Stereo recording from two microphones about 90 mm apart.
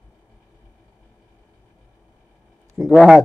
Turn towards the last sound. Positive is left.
turn(degrees=0)  # may be behind; listen again after turning